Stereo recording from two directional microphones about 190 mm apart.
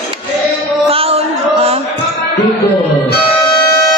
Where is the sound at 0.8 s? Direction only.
30° right (ahead or behind).